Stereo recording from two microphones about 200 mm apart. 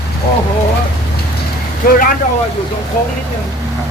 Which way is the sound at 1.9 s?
45° left (ahead or behind).